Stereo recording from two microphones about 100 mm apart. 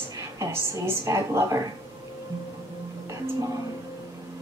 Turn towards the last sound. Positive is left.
turn(degrees=-30)  # may be behind; listen again after turning